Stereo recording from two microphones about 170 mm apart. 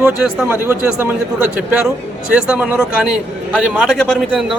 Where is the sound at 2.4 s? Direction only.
5° right (ahead or behind).